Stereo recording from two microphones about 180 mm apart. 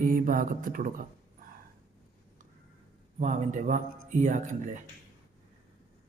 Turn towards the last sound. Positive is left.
turn(degrees=-45)  # may be behind; listen again after turning